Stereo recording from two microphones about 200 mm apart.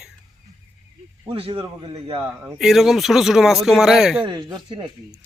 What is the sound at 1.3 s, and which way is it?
Speech, 25° right (ahead or behind).